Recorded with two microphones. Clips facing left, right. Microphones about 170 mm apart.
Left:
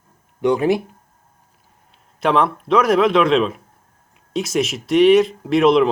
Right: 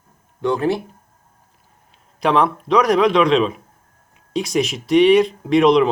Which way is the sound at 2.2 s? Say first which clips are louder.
Even; centre (ahead or behind).